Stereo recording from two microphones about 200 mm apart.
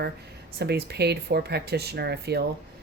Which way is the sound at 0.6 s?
55° right (ahead or behind).